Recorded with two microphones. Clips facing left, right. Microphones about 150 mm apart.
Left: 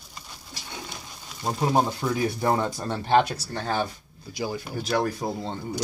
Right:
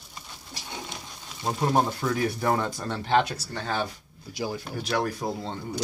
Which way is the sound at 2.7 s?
35° left (ahead or behind).